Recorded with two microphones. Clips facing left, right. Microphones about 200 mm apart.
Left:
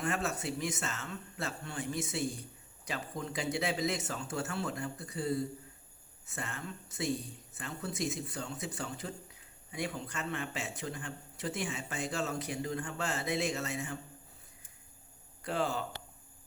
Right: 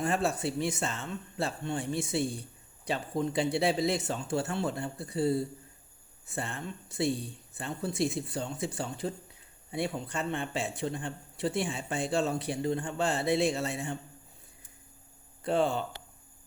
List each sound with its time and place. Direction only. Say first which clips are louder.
0.0 s speech: right 5 dB; 30° right (ahead or behind)
15.4 s speech: right 6 dB; 30° right (ahead or behind)